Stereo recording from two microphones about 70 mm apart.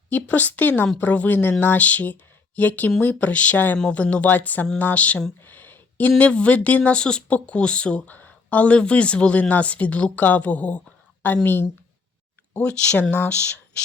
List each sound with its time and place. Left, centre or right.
0.1 s speech: left
12.5 s speech: centre